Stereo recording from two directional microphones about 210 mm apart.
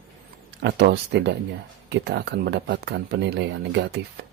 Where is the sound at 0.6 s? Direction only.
55° right (ahead or behind).